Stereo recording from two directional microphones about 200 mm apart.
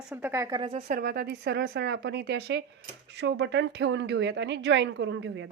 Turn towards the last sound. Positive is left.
turn(degrees=-60)  # may be behind; listen again after turning